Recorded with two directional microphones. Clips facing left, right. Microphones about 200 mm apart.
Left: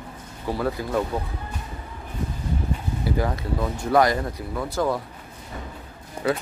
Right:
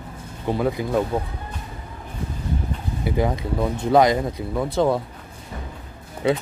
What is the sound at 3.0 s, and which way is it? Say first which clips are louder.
Speech: right 3 dB; 20° right (ahead or behind).